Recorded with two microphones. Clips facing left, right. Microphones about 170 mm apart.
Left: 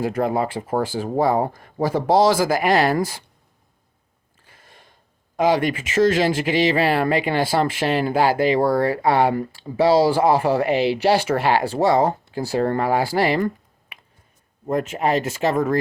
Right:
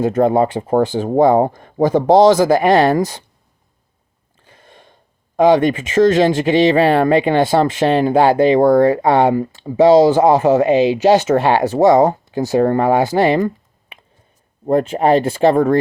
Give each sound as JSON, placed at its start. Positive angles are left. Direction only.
{"t": 0.0, "sound": "speech", "side_deg": -25}
{"t": 4.4, "sound": "sniff", "side_deg": -25}
{"t": 5.5, "sound": "speech", "side_deg": -25}
{"t": 14.7, "sound": "speech", "side_deg": -30}